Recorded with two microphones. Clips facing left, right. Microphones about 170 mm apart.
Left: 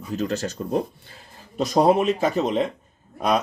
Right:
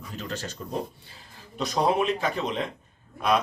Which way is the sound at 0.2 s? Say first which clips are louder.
Left 8 dB; 45° left (ahead or behind).